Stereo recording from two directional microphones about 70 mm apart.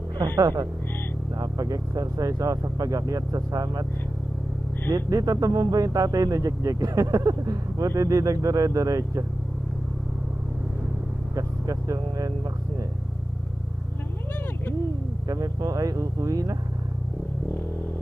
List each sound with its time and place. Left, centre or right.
0.3 s speech: right
4.9 s speech: right
11.3 s speech: right
15.3 s speech: right